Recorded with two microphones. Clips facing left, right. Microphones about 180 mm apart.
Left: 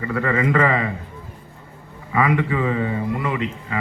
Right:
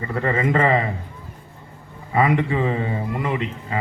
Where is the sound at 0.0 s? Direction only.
30° right (ahead or behind).